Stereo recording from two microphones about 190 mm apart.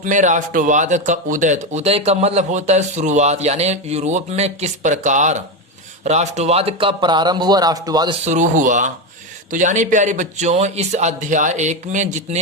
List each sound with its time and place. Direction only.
0.0 s speech: 40° right (ahead or behind); by 8.1 s 20° right (ahead or behind)
8.2 s speech: 40° right (ahead or behind)